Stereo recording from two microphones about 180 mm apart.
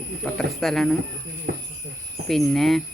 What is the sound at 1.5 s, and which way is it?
Cricket, 60° right (ahead or behind).